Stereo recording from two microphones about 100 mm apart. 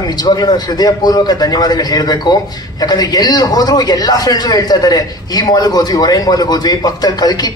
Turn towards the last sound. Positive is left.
turn(degrees=40)  # may be behind; listen again after turning